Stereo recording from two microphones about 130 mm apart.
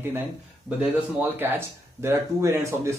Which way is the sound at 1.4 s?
20° right (ahead or behind).